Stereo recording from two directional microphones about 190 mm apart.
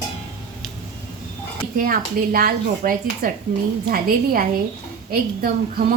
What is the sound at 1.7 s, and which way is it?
Speech, 50° right (ahead or behind).